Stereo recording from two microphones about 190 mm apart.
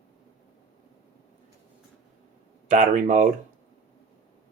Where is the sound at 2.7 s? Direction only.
40° right (ahead or behind).